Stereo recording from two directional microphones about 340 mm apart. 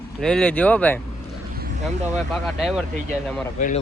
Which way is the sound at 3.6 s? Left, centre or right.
Left.